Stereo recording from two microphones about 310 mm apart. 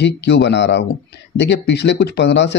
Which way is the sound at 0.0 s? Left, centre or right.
Left.